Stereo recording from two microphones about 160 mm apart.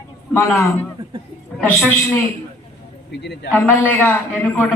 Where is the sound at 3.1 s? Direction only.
90° left.